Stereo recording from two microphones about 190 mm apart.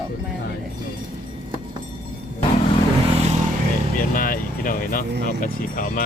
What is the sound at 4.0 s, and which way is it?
Speech, 45° left (ahead or behind).